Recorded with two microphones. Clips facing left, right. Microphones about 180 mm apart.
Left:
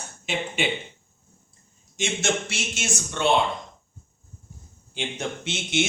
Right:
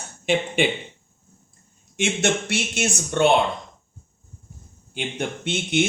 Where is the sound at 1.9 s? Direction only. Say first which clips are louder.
Right 4 dB; 60° right (ahead or behind).